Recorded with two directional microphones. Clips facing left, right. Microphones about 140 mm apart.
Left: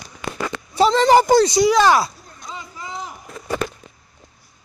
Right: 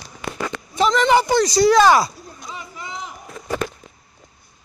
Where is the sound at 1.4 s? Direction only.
20° left (ahead or behind).